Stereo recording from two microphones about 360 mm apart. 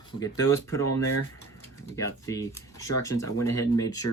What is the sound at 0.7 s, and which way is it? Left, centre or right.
Speech, centre.